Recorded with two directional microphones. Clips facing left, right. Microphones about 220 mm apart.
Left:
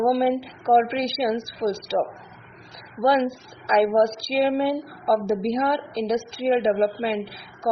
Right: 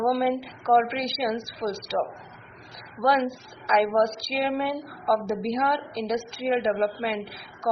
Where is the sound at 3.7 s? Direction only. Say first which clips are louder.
Left 3 dB; 30° left (ahead or behind).